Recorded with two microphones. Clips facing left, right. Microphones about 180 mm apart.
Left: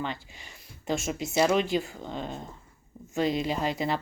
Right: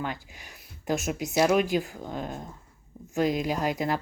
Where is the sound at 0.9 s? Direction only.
Centre (ahead or behind).